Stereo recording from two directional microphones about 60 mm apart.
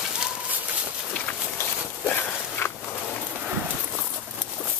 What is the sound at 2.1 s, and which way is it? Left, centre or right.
Walk, left.